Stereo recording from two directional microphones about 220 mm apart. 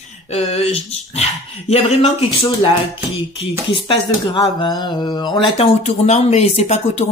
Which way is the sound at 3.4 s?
20° left (ahead or behind).